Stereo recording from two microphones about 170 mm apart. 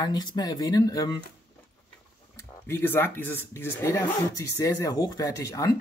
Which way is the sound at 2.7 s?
10° left (ahead or behind).